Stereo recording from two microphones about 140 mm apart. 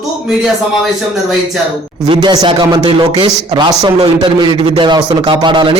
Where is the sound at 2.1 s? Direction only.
30° right (ahead or behind).